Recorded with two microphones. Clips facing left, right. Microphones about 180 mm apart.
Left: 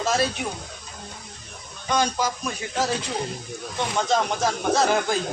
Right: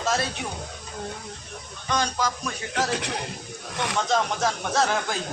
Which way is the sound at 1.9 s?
10° left (ahead or behind).